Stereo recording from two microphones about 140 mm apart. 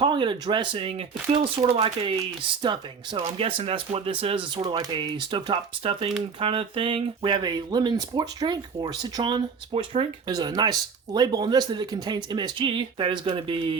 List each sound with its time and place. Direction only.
0.0 s speech: 35° right (ahead or behind)
9.7 s speech: 45° right (ahead or behind)
10.2 s speech: 30° right (ahead or behind)